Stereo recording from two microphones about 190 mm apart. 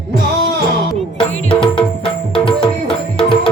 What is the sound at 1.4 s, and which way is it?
Music, 30° left (ahead or behind).